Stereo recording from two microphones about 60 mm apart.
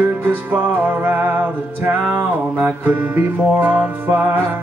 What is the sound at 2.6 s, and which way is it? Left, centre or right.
Music, right.